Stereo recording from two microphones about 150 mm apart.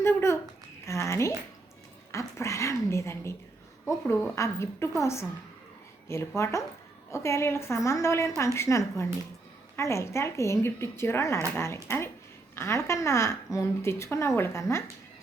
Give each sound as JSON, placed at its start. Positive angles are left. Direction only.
{"t": 0.0, "sound": "a sound", "side_deg": 15}
{"t": 0.9, "sound": "speech", "side_deg": 20}
{"t": 6.1, "sound": "speech", "side_deg": 20}